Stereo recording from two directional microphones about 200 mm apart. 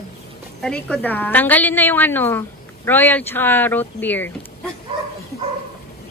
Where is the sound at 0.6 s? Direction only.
5° left (ahead or behind).